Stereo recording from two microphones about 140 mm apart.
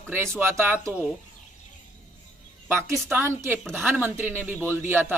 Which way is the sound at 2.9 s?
15° right (ahead or behind).